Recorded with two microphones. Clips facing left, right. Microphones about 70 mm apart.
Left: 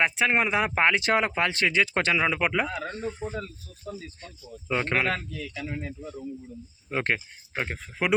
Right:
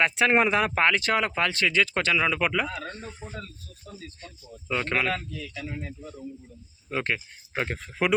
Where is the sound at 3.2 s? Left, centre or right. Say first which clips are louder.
Left 7 dB; left.